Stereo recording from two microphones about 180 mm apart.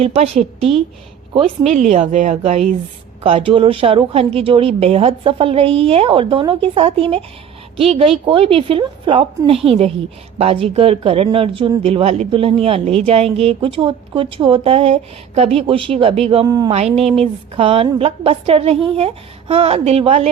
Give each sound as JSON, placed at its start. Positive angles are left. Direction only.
{"t": 0.0, "sound": "speech", "side_deg": -35}